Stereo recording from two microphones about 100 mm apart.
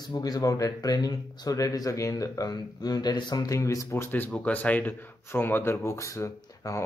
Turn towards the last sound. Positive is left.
turn(degrees=30)  # may be behind; listen again after turning